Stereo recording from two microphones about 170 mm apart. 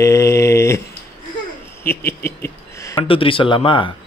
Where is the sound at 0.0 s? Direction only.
15° left (ahead or behind).